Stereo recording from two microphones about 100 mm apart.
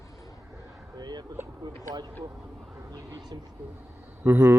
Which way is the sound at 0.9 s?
45° right (ahead or behind).